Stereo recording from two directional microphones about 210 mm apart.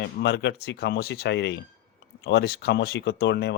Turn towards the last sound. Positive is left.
turn(degrees=50)  # may be behind; listen again after turning